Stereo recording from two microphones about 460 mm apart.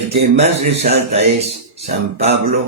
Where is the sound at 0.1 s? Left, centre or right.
Centre.